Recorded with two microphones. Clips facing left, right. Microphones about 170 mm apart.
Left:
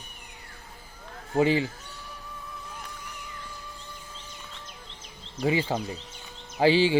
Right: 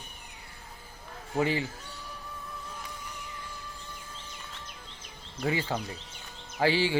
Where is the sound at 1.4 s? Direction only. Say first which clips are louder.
Left 5 dB; 20° left (ahead or behind).